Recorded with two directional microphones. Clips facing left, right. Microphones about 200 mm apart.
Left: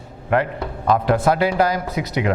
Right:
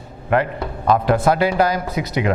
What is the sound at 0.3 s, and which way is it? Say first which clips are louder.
A man's voice: right 1 dB; 15° right (ahead or behind).